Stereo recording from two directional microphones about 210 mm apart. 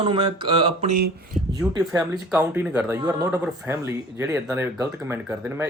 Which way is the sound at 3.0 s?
20° right (ahead or behind).